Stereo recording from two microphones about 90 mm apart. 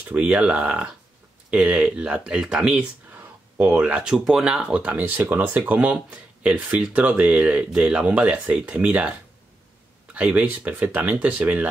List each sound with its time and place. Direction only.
0.1 s speech: 15° right (ahead or behind)